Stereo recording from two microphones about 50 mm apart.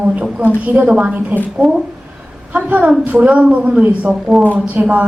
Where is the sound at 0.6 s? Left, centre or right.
Right.